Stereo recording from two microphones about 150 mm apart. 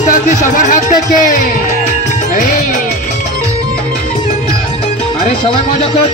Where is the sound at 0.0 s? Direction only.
60° left (ahead or behind).